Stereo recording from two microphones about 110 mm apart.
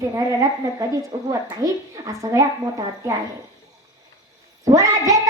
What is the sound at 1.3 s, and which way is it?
A woman's voice, 30° right (ahead or behind).